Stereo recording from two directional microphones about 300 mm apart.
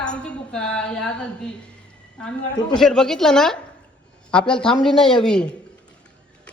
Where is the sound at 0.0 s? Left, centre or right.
Centre.